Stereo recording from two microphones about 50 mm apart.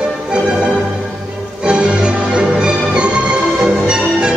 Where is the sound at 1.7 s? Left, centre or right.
Centre.